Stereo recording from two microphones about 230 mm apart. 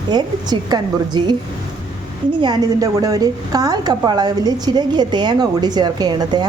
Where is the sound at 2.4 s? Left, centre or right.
Centre.